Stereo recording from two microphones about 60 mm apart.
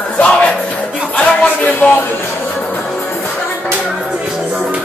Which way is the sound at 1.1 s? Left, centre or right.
Left.